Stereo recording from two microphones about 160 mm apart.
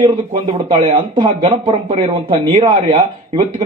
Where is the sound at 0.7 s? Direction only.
35° right (ahead or behind).